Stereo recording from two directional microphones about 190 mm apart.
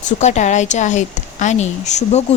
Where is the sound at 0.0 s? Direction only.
40° left (ahead or behind).